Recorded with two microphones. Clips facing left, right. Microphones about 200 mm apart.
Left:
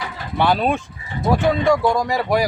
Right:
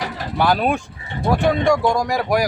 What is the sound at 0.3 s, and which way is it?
Speech, 5° right (ahead or behind).